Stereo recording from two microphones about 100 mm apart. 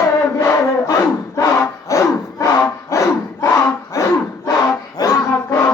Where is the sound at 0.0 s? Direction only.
30° left (ahead or behind).